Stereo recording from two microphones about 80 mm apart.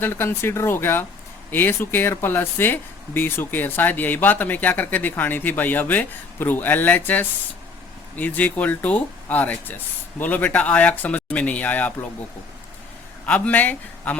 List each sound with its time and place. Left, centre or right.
0.0 s speech: left
13.2 s speech: centre